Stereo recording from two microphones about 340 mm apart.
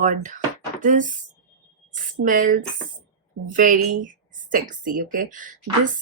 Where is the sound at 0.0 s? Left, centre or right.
Right.